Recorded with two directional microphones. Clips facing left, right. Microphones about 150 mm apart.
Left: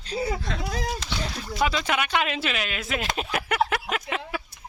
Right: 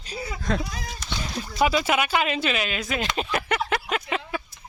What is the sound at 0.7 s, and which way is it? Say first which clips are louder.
Speech: left 7 dB; 65° left (ahead or behind).